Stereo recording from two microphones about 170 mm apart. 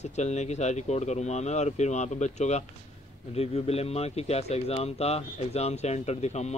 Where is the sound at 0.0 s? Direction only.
40° left (ahead or behind).